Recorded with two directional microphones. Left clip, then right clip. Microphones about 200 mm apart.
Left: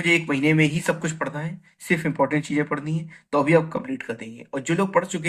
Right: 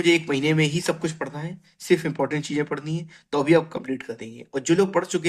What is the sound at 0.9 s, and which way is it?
Speech, 30° right (ahead or behind).